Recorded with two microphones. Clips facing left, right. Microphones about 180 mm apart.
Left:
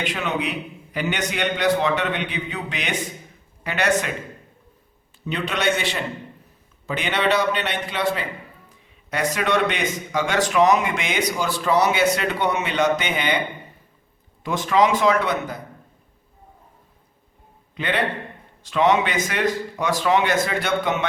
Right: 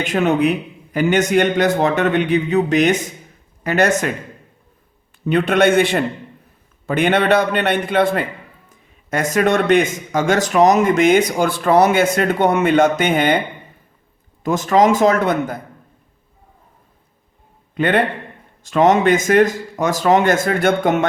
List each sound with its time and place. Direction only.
0.0 s a man's voice: 45° right (ahead or behind)
5.2 s a man's voice: 55° right (ahead or behind)
14.4 s a man's voice: 45° right (ahead or behind)
17.7 s a man's voice: 50° right (ahead or behind)